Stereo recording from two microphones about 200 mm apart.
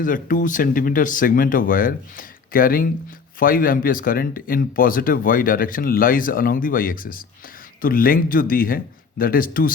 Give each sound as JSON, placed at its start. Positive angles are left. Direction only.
{"t": 0.0, "sound": "speech", "side_deg": 40}